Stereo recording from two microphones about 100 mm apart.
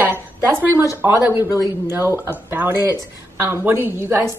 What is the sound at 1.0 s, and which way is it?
Speech, 20° right (ahead or behind).